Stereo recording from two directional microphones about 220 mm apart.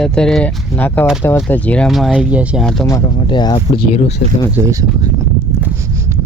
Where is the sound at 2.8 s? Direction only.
15° left (ahead or behind).